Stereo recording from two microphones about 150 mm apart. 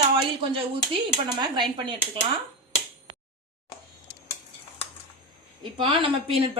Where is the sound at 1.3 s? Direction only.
30° right (ahead or behind).